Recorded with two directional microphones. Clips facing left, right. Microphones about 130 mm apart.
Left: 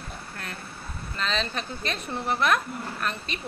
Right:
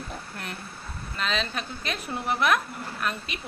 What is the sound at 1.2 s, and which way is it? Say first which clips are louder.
A woman's voice: even; 5° right (ahead or behind).